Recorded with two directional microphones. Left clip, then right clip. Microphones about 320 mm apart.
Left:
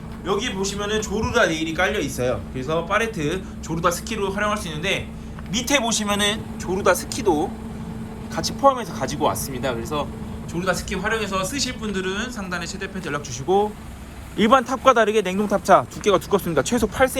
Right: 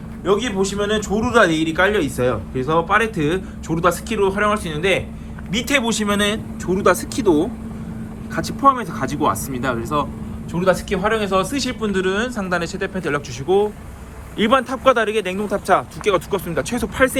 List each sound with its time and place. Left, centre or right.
0.3 s a man's voice: centre